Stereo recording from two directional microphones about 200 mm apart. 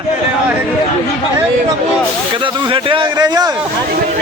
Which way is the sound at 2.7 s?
25° right (ahead or behind).